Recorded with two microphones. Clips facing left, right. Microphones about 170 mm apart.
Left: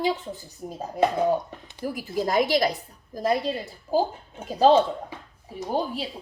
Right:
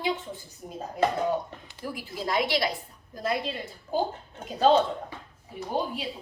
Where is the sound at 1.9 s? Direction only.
45° left (ahead or behind).